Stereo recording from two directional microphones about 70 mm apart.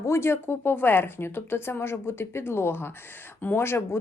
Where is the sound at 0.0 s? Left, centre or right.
Left.